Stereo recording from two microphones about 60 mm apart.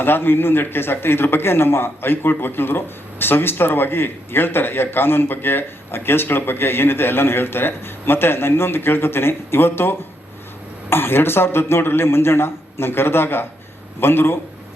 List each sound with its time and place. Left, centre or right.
0.0 s a man's voice: left